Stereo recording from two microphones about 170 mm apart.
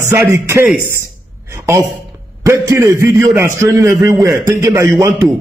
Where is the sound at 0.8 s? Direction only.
15° right (ahead or behind).